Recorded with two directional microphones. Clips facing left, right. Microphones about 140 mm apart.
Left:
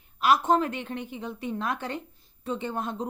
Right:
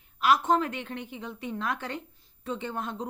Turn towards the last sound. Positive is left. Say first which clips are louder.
# left 3 dB
turn(degrees=35)  # may be behind; listen again after turning